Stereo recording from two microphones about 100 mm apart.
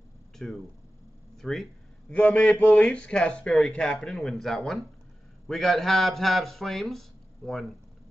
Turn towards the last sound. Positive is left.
turn(degrees=0)  # may be behind; listen again after turning